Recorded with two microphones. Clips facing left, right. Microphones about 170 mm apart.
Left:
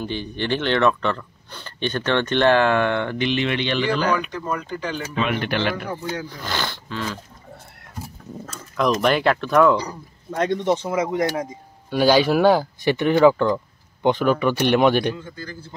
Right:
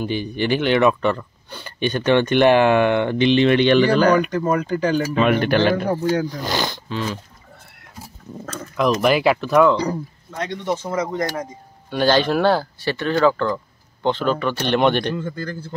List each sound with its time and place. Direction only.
0.0 s speech: 10° right (ahead or behind)
3.4 s speech: 50° right (ahead or behind)
6.2 s speech: 15° right (ahead or behind)
8.5 s speech: centre (ahead or behind)
10.3 s speech: 50° left (ahead or behind)
10.9 s speech: 10° left (ahead or behind)
15.1 s speech: 55° right (ahead or behind)